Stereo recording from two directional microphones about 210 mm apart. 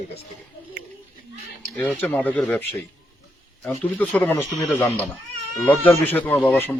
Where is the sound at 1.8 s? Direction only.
10° left (ahead or behind).